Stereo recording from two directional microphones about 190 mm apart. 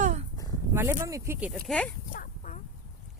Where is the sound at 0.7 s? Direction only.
15° right (ahead or behind).